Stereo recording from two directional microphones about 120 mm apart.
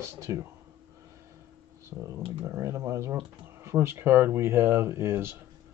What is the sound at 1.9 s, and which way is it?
Speech, 25° right (ahead or behind).